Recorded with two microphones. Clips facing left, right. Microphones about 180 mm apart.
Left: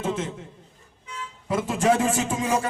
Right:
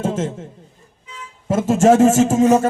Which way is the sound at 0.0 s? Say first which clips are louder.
Right 6 dB; 45° right (ahead or behind).